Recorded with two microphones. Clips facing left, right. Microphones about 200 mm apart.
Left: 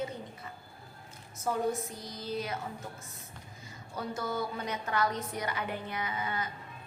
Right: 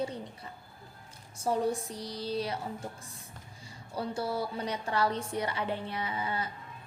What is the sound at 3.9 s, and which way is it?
A woman's voice, 30° right (ahead or behind).